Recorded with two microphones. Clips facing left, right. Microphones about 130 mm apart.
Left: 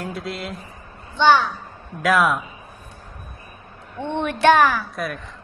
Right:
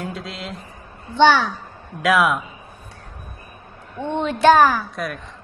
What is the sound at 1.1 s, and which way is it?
Speech, 90° right.